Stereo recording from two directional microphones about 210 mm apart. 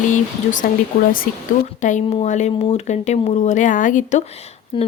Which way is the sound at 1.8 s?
30° left (ahead or behind).